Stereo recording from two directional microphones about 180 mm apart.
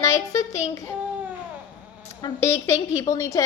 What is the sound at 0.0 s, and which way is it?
Child singing, 15° left (ahead or behind).